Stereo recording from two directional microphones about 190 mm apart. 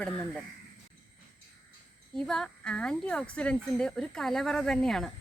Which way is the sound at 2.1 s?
5° left (ahead or behind).